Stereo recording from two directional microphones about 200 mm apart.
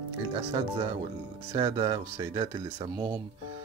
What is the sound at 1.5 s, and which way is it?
Speech, 25° right (ahead or behind).